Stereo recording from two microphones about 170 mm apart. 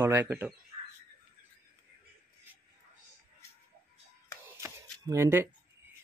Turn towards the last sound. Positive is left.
turn(degrees=-15)  # may be behind; listen again after turning